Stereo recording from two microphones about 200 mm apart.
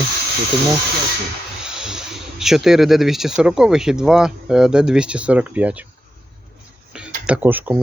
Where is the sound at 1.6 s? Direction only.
5° right (ahead or behind).